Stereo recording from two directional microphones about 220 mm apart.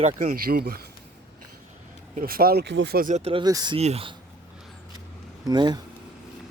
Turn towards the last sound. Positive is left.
turn(degrees=-20)  # may be behind; listen again after turning